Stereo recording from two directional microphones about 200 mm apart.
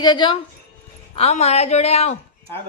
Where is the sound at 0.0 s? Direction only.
25° left (ahead or behind).